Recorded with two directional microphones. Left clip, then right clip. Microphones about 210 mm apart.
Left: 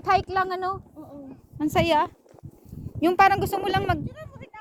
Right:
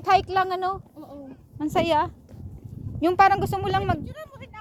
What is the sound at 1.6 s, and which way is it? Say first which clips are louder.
A woman's voice: left 1 dB; 20° left (ahead or behind).